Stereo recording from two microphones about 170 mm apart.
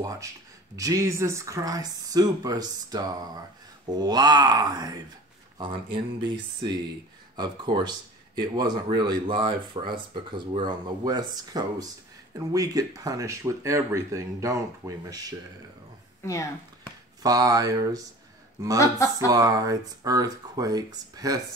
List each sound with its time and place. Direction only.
0.0 s speech: 20° right (ahead or behind)
16.2 s speech: 15° left (ahead or behind)
17.2 s speech: 20° right (ahead or behind)
19.1 s speech: 20° right (ahead or behind)